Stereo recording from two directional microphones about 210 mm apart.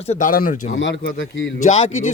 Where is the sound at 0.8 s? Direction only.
60° left (ahead or behind).